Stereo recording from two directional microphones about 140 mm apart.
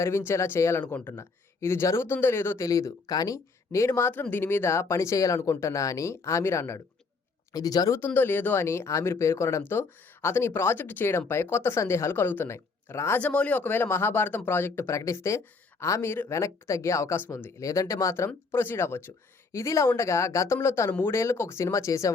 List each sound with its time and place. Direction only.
0.0 s speech: 20° left (ahead or behind)